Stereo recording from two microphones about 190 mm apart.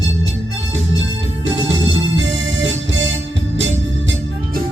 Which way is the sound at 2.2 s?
75° right (ahead or behind).